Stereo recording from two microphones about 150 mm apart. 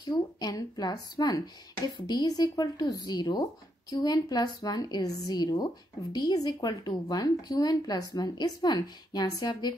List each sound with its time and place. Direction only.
0.0 s speech: 25° left (ahead or behind)